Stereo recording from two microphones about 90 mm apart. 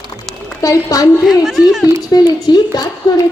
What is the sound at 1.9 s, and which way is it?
A woman's voice, 45° left (ahead or behind).